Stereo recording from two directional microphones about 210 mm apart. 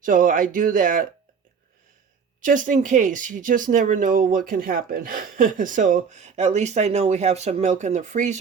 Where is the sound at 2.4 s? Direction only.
40° right (ahead or behind).